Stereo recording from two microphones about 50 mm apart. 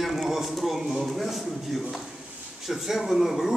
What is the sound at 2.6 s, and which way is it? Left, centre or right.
Speech, centre.